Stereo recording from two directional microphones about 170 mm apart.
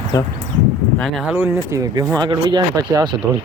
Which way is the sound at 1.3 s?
15° right (ahead or behind).